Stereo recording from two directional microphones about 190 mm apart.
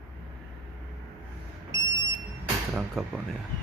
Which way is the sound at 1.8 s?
25° left (ahead or behind).